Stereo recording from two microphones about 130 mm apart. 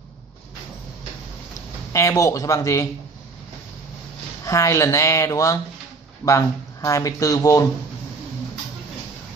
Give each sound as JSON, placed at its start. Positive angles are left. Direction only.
{"t": 1.9, "sound": "speech", "side_deg": 25}
{"t": 4.5, "sound": "speech", "side_deg": 25}